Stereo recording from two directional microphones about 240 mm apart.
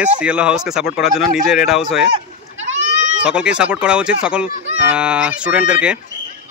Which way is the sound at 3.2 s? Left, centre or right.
Centre.